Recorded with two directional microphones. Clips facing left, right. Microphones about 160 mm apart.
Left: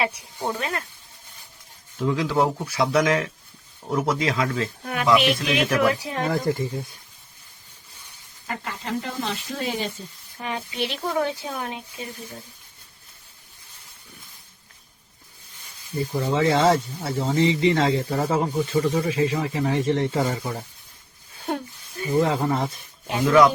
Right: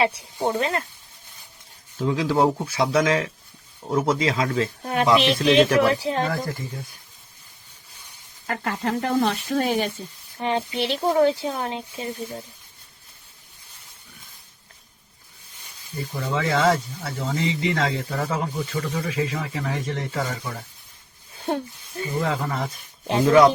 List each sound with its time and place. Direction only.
0.0 s speech: 30° right (ahead or behind)
2.0 s speech: 25° right (ahead or behind)
6.2 s speech: 25° left (ahead or behind)
8.4 s speech: 60° right (ahead or behind)
10.3 s speech: 30° right (ahead or behind)
16.2 s speech: 25° left (ahead or behind)
21.4 s a sound: 25° right (ahead or behind)
22.0 s speech: 30° left (ahead or behind)
23.0 s speech: 30° right (ahead or behind)